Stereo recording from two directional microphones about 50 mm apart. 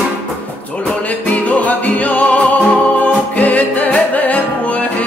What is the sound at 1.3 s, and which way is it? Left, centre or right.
Music, left.